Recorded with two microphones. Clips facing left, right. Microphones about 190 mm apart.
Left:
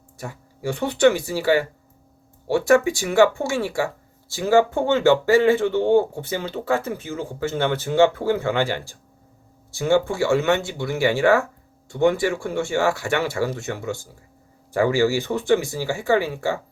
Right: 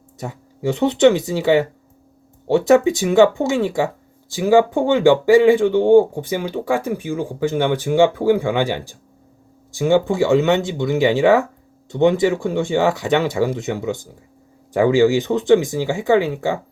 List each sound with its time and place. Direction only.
0.2 s speech: 20° right (ahead or behind)